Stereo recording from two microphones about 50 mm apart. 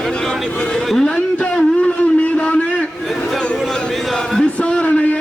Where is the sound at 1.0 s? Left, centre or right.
Left.